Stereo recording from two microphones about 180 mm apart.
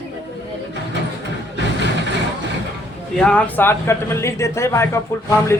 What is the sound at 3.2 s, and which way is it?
Speech, 5° left (ahead or behind).